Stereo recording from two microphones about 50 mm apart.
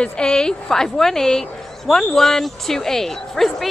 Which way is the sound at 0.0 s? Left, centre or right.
Centre.